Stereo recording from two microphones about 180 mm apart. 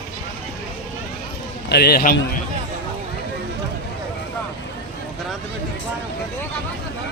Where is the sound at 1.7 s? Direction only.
65° left (ahead or behind).